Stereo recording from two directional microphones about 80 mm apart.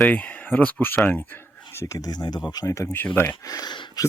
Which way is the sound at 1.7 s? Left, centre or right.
Left.